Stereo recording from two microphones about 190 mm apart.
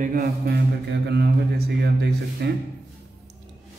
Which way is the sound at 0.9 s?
60° right (ahead or behind).